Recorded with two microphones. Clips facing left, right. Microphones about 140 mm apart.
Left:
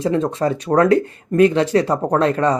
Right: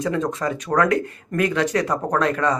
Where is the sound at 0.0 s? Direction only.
30° left (ahead or behind).